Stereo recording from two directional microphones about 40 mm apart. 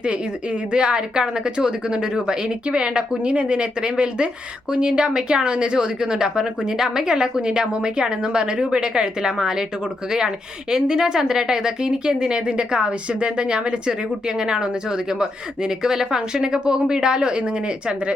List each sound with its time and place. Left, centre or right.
0.0 s a woman's voice: right